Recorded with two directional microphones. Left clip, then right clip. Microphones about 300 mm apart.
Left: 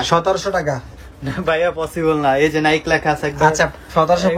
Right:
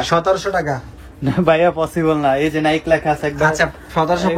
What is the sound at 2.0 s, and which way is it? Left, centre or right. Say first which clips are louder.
Speech: left 2 dB; centre.